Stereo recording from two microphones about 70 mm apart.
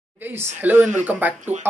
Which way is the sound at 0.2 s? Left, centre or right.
Right.